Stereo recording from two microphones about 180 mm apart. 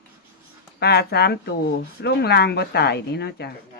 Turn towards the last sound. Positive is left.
turn(degrees=65)  # may be behind; listen again after turning